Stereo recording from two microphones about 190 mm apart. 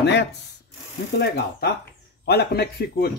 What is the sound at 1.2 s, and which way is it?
A man's voice, 55° left (ahead or behind).